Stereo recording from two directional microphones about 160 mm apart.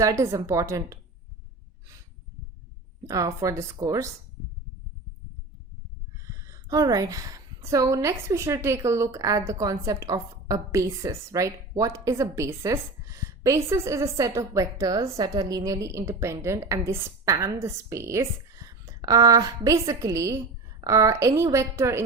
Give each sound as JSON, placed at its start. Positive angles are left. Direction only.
{"t": 0.0, "sound": "a woman's voice", "side_deg": -20}
{"t": 3.1, "sound": "a woman's voice", "side_deg": -20}
{"t": 6.1, "sound": "a woman's voice", "side_deg": -20}